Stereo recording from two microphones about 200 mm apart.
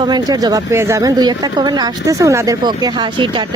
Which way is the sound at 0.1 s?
20° right (ahead or behind).